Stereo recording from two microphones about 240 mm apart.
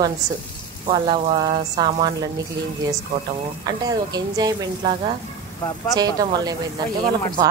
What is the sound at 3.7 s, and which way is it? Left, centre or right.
Speech, centre.